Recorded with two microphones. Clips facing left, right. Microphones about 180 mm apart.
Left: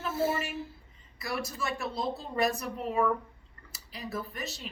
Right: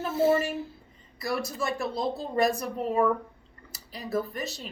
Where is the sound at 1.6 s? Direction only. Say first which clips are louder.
Right 4 dB; 35° right (ahead or behind).